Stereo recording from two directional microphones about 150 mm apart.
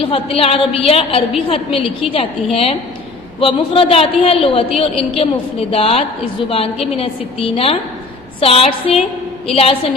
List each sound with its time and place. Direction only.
0.0 s a man's voice: 40° left (ahead or behind)